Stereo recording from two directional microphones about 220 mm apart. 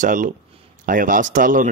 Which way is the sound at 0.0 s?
35° right (ahead or behind).